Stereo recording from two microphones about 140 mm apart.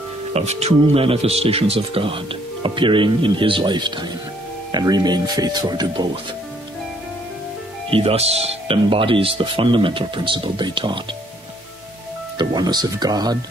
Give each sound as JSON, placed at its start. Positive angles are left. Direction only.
{"t": 0.3, "sound": "speech", "side_deg": -50}
{"t": 7.9, "sound": "speech", "side_deg": -45}
{"t": 12.4, "sound": "speech", "side_deg": -30}